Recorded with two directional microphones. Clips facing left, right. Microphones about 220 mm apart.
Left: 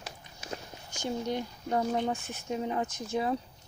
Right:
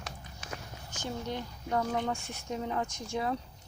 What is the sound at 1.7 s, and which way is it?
Speech, 25° left (ahead or behind).